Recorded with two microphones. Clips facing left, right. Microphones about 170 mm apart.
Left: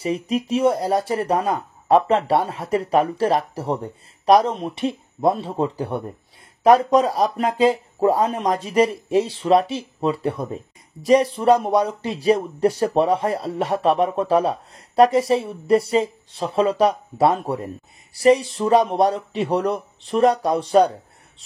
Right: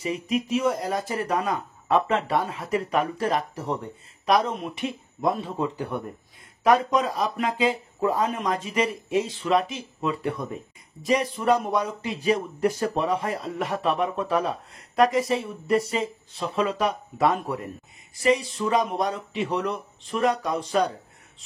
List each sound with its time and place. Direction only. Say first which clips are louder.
0.0 s speech: left 4 dB; 35° left (ahead or behind)